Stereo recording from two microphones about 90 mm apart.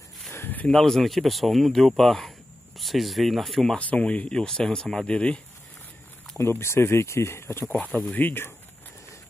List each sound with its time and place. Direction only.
0.3 s a sound: 25° left (ahead or behind)
0.7 s speech: 5° left (ahead or behind)
3.7 s speech: 15° left (ahead or behind)
6.3 s speech: 30° left (ahead or behind)